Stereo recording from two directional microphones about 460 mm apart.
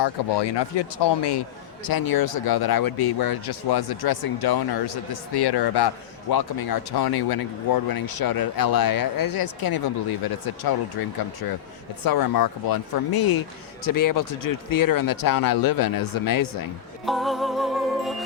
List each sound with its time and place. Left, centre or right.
0.0 s speech: left
12.0 s speech: left
17.1 s music: centre